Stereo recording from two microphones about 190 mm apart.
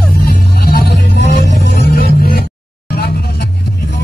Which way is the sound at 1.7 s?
60° left (ahead or behind).